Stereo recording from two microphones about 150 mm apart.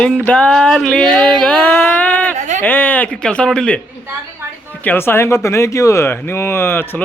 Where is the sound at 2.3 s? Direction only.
50° right (ahead or behind).